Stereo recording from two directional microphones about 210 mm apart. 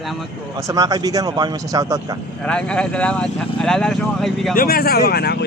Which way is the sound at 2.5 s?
5° left (ahead or behind).